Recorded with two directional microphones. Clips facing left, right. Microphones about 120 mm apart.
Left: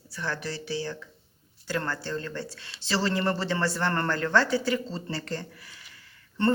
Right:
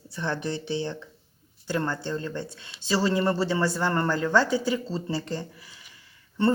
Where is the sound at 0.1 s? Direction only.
25° right (ahead or behind).